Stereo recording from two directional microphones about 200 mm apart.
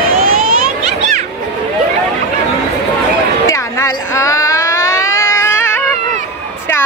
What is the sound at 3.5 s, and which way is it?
Baby cry, 15° left (ahead or behind).